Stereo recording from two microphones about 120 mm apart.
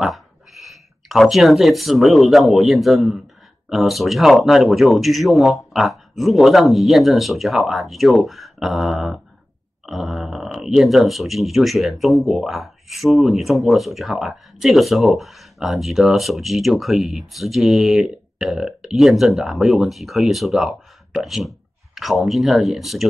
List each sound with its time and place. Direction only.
0.0 s speech: centre (ahead or behind)